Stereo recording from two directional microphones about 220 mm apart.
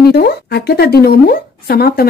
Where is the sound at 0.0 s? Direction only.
45° left (ahead or behind).